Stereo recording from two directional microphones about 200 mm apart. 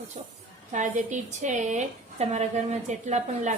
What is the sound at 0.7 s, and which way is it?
Speech, 35° right (ahead or behind).